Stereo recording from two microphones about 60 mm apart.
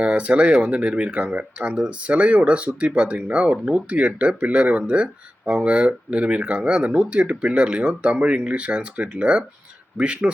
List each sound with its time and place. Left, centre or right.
0.0 s speech: right